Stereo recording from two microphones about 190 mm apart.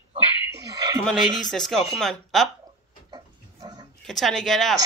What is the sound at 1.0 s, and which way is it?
Speech, centre (ahead or behind).